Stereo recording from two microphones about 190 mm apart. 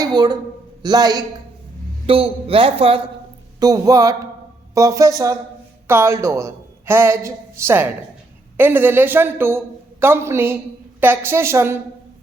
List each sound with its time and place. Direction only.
0.0 s a man's voice: 20° right (ahead or behind)
3.6 s a woman's voice: 20° right (ahead or behind)